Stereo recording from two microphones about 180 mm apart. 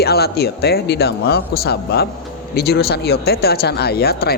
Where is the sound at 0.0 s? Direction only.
60° left (ahead or behind).